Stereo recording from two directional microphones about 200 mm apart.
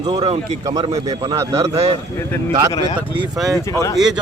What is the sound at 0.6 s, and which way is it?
Speech, 20° right (ahead or behind).